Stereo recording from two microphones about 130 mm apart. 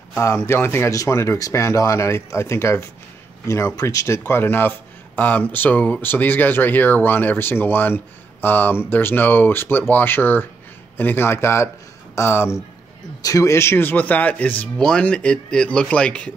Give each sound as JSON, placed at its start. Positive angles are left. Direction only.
{"t": 0.1, "sound": "speech", "side_deg": 25}